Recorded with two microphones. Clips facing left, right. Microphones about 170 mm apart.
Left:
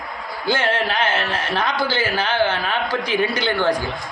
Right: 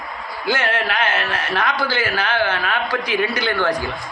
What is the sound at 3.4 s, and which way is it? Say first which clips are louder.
Speech: left 1 dB; 10° left (ahead or behind).